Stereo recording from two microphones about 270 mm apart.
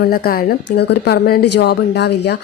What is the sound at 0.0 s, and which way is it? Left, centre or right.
A woman's voice, left.